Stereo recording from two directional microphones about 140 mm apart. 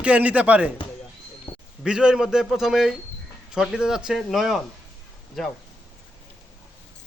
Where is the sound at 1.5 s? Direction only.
45° left (ahead or behind).